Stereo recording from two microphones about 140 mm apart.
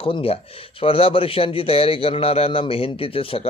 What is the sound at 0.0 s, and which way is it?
A man's voice, 40° left (ahead or behind).